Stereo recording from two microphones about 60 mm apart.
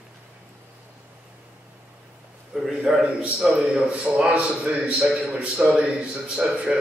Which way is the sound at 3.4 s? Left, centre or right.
Centre.